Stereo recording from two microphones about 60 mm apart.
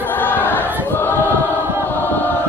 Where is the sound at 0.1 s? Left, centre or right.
Left.